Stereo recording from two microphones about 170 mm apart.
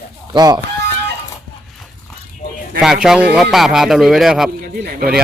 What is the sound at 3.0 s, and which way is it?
Speech, 5° right (ahead or behind).